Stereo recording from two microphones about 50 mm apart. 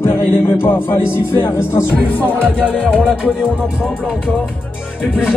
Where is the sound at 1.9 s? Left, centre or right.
Left.